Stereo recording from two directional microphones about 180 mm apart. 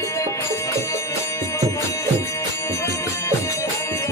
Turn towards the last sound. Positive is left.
turn(degrees=15)  # may be behind; listen again after turning